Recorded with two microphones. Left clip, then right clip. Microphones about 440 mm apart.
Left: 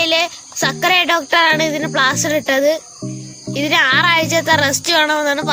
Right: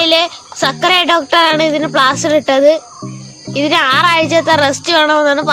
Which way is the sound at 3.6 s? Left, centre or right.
Right.